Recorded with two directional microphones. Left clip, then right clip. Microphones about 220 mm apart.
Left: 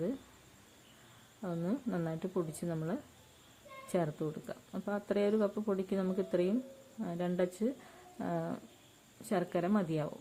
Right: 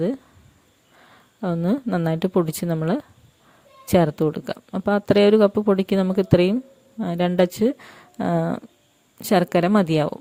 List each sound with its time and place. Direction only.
1.4 s speech: 45° right (ahead or behind)